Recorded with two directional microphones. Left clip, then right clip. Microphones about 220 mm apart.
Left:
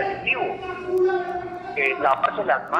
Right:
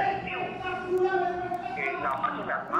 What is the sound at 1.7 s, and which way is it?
A man's voice, 25° left (ahead or behind).